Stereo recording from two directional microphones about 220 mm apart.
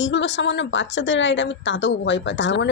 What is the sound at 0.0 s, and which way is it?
A woman's voice, 55° left (ahead or behind).